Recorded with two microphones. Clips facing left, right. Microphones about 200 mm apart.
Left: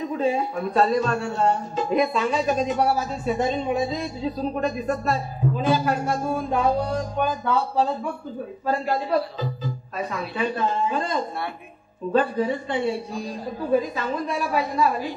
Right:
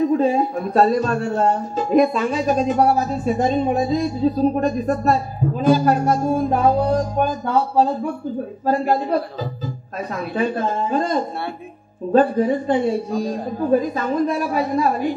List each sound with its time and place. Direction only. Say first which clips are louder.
0.2 s speech: right 5 dB; 45° right (ahead or behind)